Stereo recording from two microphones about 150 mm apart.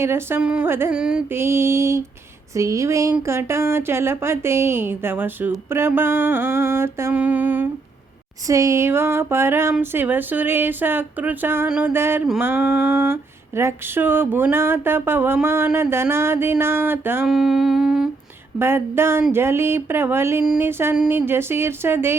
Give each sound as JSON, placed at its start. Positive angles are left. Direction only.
{"t": 0.0, "sound": "speech", "side_deg": -15}
{"t": 0.9, "sound": "humming", "side_deg": -5}
{"t": 1.3, "sound": "speech", "side_deg": -15}
{"t": 17.2, "sound": "humming", "side_deg": -5}
{"t": 18.6, "sound": "speech", "side_deg": -15}